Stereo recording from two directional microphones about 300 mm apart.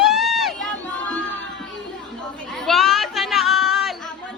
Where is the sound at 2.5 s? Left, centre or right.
Centre.